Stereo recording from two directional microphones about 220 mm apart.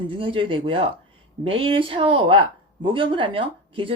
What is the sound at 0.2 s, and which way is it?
A woman's voice, 25° right (ahead or behind).